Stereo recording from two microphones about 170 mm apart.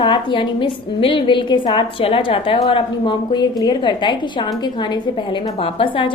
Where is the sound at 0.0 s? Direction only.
30° left (ahead or behind).